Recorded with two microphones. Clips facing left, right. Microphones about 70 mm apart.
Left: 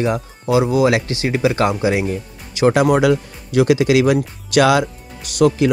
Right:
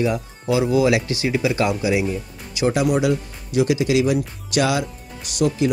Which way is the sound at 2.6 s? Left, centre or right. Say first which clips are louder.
Left 5 dB; left.